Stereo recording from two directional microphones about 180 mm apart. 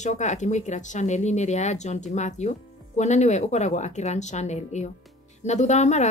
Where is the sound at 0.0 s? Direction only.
40° left (ahead or behind).